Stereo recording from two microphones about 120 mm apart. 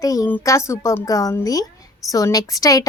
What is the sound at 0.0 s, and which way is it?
A woman's voice, 30° left (ahead or behind).